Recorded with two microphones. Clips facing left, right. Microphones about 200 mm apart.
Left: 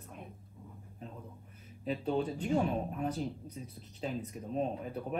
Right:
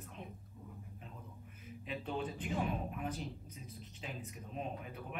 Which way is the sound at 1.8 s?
35° left (ahead or behind).